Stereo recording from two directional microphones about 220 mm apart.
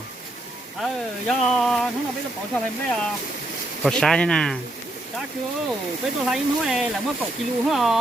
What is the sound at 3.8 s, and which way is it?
Speech, centre (ahead or behind).